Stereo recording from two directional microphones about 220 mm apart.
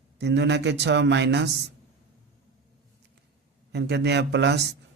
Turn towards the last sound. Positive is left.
turn(degrees=-50)  # may be behind; listen again after turning